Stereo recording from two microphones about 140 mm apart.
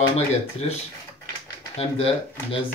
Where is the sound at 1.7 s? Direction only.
45° left (ahead or behind).